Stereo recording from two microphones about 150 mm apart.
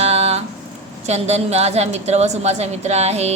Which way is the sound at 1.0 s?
45° right (ahead or behind).